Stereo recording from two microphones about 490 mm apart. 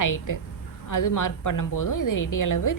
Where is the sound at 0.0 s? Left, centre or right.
Left.